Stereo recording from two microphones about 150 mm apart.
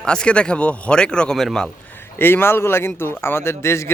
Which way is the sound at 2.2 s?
15° left (ahead or behind).